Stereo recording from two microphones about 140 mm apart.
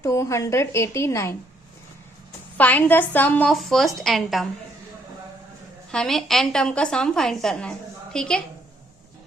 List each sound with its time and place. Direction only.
0.0 s a woman's voice: 20° left (ahead or behind)
2.6 s a woman's voice: 10° left (ahead or behind)
3.5 s a woman's voice: centre (ahead or behind)
5.9 s a woman's voice: 5° left (ahead or behind)